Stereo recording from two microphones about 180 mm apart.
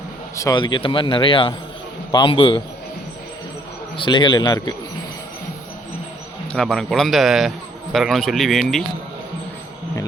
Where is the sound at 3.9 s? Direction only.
25° left (ahead or behind).